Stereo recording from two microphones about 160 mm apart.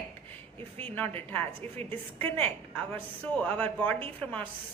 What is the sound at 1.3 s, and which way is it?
A woman's voice, 10° left (ahead or behind).